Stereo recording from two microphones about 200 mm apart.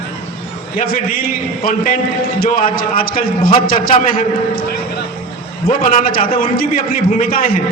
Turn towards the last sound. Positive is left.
turn(degrees=45)  # may be behind; listen again after turning